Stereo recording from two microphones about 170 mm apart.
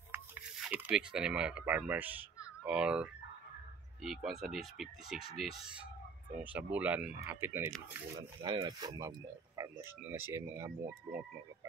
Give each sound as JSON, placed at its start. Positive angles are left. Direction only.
{"t": 0.1, "sound": "speech", "side_deg": -10}
{"t": 8.2, "sound": "speech", "side_deg": -25}